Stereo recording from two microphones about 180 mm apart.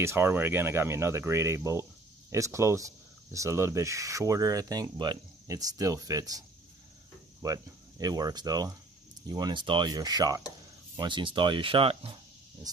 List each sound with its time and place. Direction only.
0.0 s speech: 15° right (ahead or behind)
7.4 s speech: 20° right (ahead or behind)